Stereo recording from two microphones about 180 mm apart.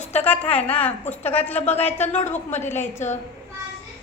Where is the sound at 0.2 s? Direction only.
10° left (ahead or behind).